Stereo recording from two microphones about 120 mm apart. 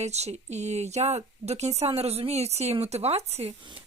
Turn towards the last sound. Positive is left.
turn(degrees=-60)  # may be behind; listen again after turning